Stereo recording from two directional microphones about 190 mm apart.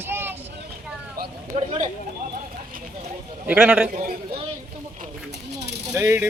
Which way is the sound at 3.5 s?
5° right (ahead or behind).